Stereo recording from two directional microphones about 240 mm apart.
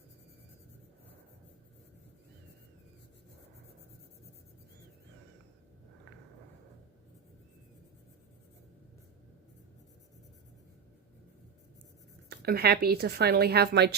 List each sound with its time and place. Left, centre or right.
12.3 s a woman's voice: right